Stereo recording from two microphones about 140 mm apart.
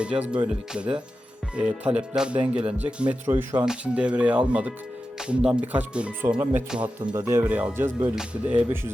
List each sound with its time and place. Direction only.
0.3 s speech: 5° right (ahead or behind)
7.0 s speech: 30° right (ahead or behind)
7.4 s speech: 10° right (ahead or behind)